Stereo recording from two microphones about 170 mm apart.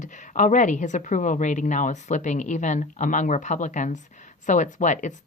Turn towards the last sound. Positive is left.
turn(degrees=45)  # may be behind; listen again after turning